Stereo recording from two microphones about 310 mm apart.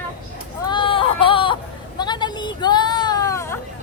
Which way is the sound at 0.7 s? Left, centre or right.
Centre.